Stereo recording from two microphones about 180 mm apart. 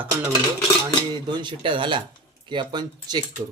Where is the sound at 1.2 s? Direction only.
25° right (ahead or behind).